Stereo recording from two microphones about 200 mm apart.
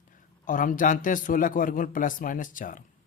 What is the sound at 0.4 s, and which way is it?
A man's voice, 40° left (ahead or behind).